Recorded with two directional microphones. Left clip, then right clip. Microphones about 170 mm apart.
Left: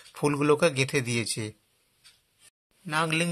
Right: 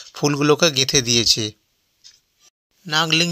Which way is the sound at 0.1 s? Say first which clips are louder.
Right 6 dB; 20° right (ahead or behind).